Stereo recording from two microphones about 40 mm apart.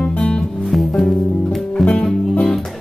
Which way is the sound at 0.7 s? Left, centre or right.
Centre.